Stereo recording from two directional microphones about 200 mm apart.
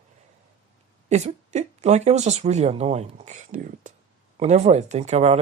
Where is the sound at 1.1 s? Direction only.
35° right (ahead or behind).